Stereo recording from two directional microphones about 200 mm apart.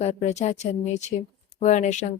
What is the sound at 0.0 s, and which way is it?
Speech, 35° left (ahead or behind).